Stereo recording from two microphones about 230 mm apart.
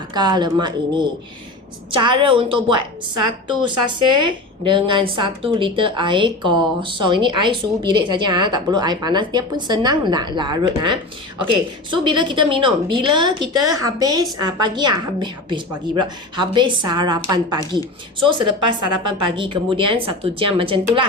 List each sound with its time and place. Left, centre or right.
0.1 s a woman's voice: centre